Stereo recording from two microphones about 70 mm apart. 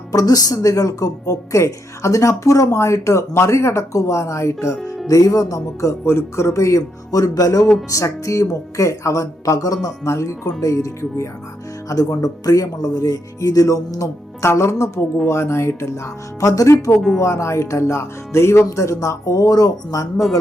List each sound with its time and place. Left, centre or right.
0.1 s speech: left
5.0 s speech: left
6.1 s speech: left
14.4 s speech: left
16.4 s speech: left
17.2 s speech: left